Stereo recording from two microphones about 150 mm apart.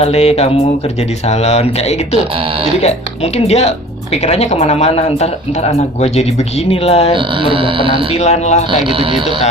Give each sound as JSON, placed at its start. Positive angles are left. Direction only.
{"t": 0.0, "sound": "speech", "side_deg": 45}
{"t": 3.3, "sound": "speech", "side_deg": 45}
{"t": 7.4, "sound": "speech", "side_deg": -35}
{"t": 8.2, "sound": "speech", "side_deg": 50}